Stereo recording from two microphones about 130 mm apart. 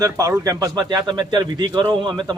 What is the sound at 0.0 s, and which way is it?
A man's voice, 25° right (ahead or behind).